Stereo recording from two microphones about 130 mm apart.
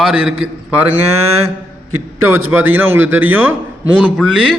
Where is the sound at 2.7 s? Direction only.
15° right (ahead or behind).